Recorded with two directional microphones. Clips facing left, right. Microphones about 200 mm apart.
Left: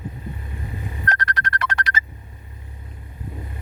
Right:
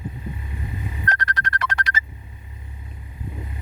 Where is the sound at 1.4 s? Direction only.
60° left (ahead or behind).